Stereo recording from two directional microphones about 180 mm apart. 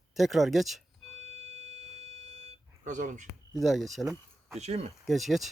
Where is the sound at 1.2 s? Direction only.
35° right (ahead or behind).